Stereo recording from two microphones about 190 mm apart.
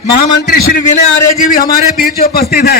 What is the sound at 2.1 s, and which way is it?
Speech, 55° left (ahead or behind).